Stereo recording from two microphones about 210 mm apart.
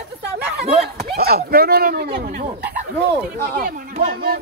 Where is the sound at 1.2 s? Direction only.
45° right (ahead or behind).